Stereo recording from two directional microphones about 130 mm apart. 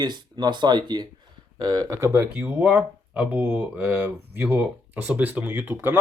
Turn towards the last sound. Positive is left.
turn(degrees=-15)  # may be behind; listen again after turning